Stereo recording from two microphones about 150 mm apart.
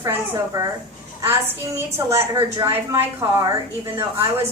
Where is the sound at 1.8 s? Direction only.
20° right (ahead or behind).